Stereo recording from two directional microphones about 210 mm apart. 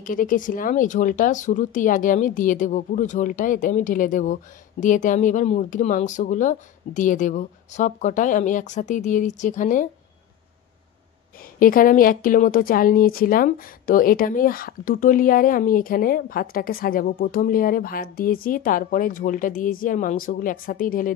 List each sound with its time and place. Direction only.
0.0 s speech: 40° left (ahead or behind)
11.6 s a woman's voice: 40° left (ahead or behind)